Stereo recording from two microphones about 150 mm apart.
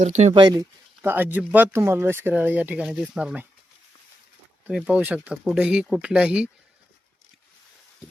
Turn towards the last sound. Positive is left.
turn(degrees=-10)  # may be behind; listen again after turning